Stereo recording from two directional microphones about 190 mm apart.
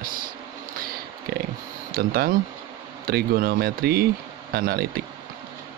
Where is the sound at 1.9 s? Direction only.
50° right (ahead or behind).